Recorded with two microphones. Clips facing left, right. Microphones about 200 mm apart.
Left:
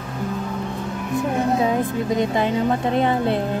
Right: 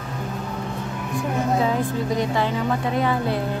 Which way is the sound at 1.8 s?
20° left (ahead or behind).